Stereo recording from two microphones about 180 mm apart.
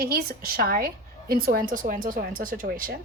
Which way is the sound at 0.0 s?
55° right (ahead or behind).